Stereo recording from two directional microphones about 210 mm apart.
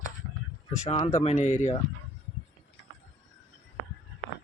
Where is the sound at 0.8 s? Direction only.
25° left (ahead or behind).